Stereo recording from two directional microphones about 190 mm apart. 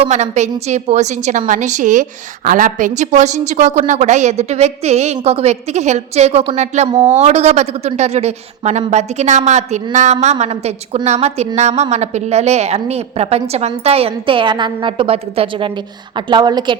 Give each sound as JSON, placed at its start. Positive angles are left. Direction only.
{"t": 0.0, "sound": "a woman's voice", "side_deg": -35}